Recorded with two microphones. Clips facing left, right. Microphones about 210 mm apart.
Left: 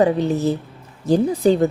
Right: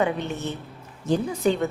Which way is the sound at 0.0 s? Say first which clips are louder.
Left 8 dB; 35° left (ahead or behind).